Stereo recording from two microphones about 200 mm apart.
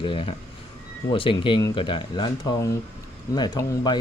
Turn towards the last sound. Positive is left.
turn(degrees=20)  # may be behind; listen again after turning